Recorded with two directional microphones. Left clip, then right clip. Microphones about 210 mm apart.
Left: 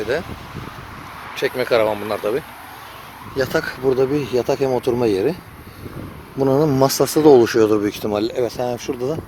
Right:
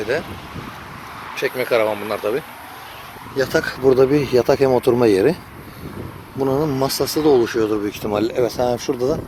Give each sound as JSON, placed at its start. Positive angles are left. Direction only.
{"t": 0.0, "sound": "speech", "side_deg": 10}
{"t": 1.4, "sound": "speech", "side_deg": 20}
{"t": 3.9, "sound": "speech", "side_deg": -40}
{"t": 6.4, "sound": "speech", "side_deg": 25}
{"t": 8.0, "sound": "speech", "side_deg": 5}